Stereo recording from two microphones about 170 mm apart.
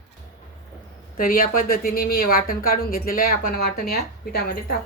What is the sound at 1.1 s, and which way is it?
A woman's voice, 55° left (ahead or behind).